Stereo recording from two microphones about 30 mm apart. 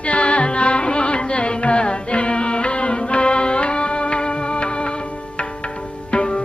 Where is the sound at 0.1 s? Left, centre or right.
Left.